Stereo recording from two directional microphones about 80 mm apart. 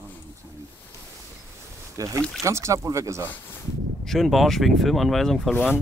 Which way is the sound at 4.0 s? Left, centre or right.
Centre.